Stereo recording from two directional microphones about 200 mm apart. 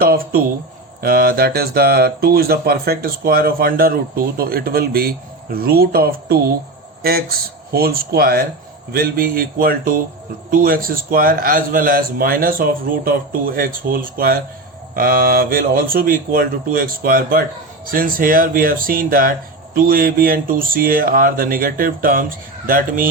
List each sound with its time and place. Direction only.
0.0 s speech: 50° right (ahead or behind)